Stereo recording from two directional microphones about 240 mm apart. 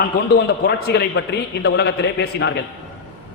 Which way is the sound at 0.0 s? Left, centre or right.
Left.